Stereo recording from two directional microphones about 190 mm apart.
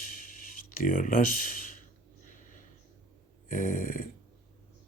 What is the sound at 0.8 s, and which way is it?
Speech, 45° left (ahead or behind).